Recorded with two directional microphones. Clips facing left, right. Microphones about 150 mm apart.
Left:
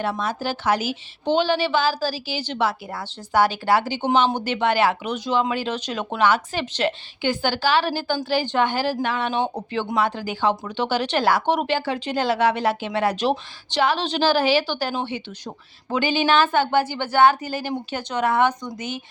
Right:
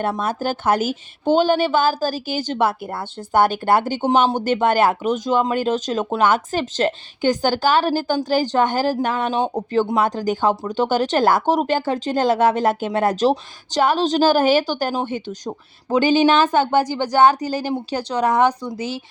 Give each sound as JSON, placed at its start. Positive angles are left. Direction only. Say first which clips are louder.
{"t": 0.0, "sound": "speech", "louder": "right 3 dB", "side_deg": -50}